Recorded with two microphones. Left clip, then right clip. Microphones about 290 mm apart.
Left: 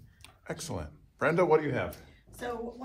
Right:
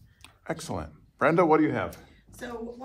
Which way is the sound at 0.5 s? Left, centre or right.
Right.